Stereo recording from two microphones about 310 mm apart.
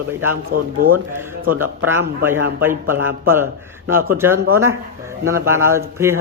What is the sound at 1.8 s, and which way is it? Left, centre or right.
Speech, centre.